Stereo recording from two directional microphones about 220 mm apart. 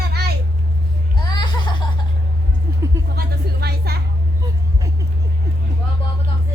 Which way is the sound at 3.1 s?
45° right (ahead or behind).